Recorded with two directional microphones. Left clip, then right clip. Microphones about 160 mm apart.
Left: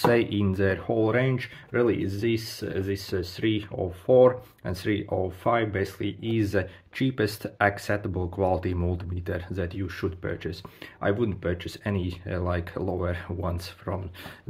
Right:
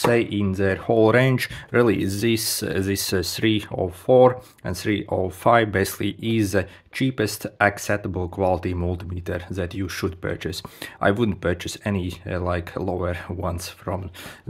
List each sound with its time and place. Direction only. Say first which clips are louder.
0.0 s speech: right 2 dB; 25° right (ahead or behind); by 3.8 s 45° right (ahead or behind)
4.0 s speech: right 3 dB; 35° right (ahead or behind)